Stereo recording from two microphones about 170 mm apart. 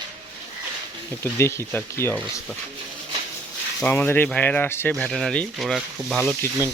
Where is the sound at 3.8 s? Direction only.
10° left (ahead or behind).